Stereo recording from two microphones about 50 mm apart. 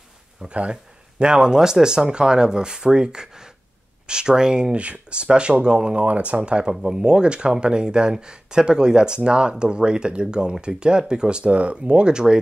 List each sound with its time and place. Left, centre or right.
0.4 s speech: right
6.0 s speech: right